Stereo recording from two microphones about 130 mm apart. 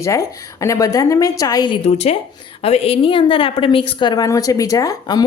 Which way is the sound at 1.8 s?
55° left (ahead or behind).